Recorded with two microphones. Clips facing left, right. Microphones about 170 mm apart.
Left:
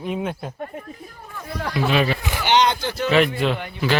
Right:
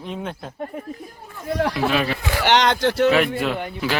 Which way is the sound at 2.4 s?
75° right (ahead or behind).